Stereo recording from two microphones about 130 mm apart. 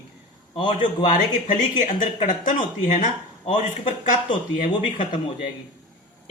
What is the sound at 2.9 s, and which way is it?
Speech, 60° left (ahead or behind).